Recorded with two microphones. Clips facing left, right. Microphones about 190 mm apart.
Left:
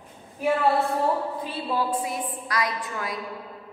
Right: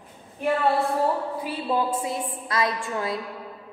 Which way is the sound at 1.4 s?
20° right (ahead or behind).